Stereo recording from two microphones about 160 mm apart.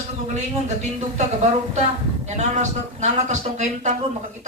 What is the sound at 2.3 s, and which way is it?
A man's voice, 45° right (ahead or behind).